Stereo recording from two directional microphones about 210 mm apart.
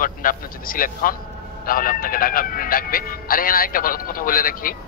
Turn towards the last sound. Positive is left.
turn(degrees=45)  # may be behind; listen again after turning